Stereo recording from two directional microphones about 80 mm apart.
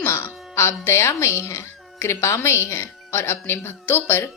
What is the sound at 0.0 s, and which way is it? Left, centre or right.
Speech, left.